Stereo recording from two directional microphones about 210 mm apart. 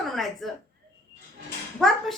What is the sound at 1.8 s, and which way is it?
Speech, centre (ahead or behind).